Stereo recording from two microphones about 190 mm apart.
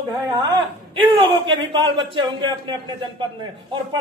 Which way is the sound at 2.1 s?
25° right (ahead or behind).